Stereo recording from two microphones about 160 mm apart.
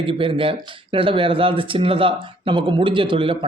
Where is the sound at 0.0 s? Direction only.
30° right (ahead or behind).